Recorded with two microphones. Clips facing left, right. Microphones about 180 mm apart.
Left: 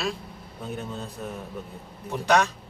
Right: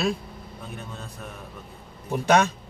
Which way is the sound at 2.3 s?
25° right (ahead or behind).